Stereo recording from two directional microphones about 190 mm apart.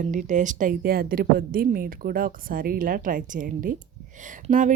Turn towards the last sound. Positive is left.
turn(degrees=-40)  # may be behind; listen again after turning